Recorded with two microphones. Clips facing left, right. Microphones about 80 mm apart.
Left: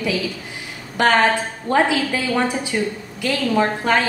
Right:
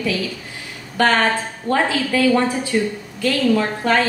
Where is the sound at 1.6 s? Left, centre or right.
Centre.